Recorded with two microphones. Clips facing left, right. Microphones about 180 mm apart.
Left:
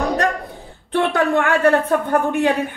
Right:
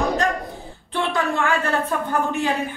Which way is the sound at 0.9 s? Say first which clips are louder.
Left 6 dB; 60° left (ahead or behind).